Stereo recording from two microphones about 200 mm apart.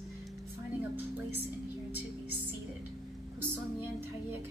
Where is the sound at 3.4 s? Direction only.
10° right (ahead or behind).